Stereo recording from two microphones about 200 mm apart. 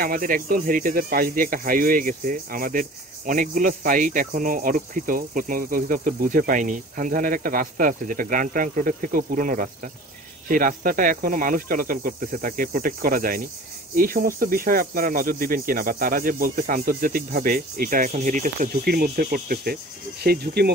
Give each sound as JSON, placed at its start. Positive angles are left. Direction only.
{"t": 0.0, "sound": "speech", "side_deg": -45}